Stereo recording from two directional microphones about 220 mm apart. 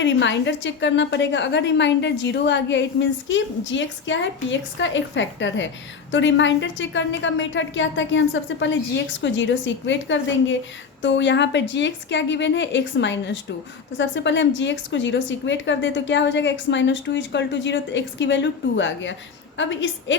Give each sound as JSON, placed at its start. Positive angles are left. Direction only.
{"t": 0.0, "sound": "a woman's voice", "side_deg": 55}